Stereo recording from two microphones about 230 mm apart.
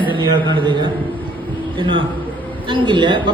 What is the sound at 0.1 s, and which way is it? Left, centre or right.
A man's voice, right.